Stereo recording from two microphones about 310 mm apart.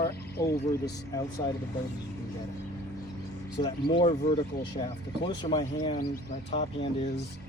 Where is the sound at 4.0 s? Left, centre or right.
Centre.